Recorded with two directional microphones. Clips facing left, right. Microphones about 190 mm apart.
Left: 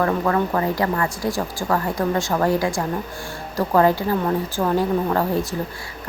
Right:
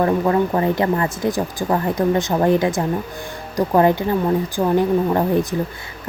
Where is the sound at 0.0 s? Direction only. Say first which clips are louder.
Right 3 dB; 20° right (ahead or behind).